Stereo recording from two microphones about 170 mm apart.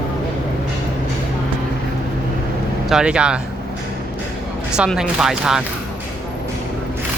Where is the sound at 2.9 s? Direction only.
5° right (ahead or behind).